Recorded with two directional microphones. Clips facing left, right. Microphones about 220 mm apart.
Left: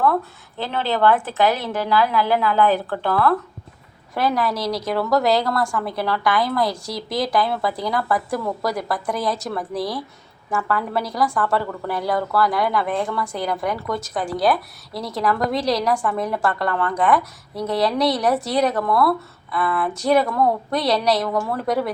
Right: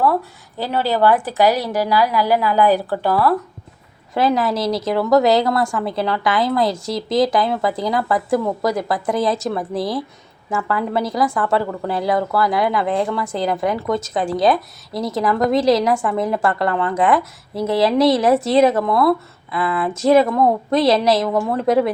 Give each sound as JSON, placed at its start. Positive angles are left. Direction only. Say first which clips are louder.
{"t": 0.7, "sound": "a woman's voice", "louder": "right 2 dB", "side_deg": -10}
{"t": 1.5, "sound": "a woman's voice", "louder": "right 4 dB", "side_deg": -40}
{"t": 1.7, "sound": "a woman's voice", "louder": "right 2 dB", "side_deg": -10}
{"t": 4.1, "sound": "a woman's voice", "louder": "right 4 dB", "side_deg": -20}